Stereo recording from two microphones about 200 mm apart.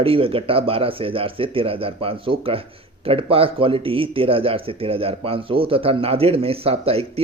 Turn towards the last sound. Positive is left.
turn(degrees=-30)  # may be behind; listen again after turning